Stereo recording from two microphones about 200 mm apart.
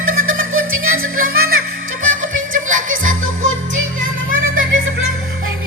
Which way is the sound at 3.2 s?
80° right.